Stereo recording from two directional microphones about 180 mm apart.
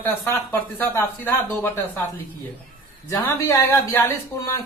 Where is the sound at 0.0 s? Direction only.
10° left (ahead or behind).